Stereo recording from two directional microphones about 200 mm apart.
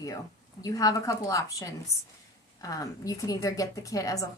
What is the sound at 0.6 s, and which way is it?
Speech, 15° left (ahead or behind).